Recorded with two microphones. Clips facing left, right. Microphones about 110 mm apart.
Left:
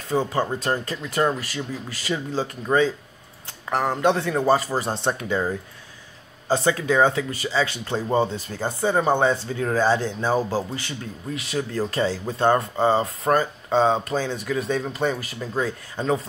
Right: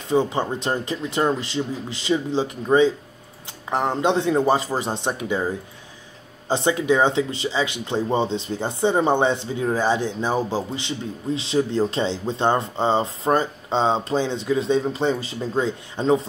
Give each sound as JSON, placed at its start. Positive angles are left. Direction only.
{"t": 0.1, "sound": "speech", "side_deg": -20}
{"t": 6.5, "sound": "speech", "side_deg": -20}